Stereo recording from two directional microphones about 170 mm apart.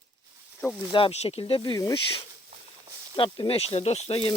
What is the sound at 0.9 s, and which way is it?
Speech, 35° left (ahead or behind).